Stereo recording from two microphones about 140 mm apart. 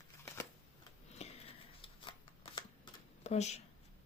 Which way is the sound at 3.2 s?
50° left (ahead or behind).